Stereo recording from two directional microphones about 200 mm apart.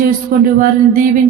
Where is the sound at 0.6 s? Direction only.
40° right (ahead or behind).